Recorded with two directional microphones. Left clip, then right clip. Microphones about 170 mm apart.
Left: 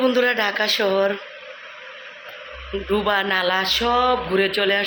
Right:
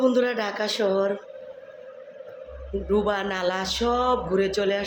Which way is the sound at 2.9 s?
5° right (ahead or behind).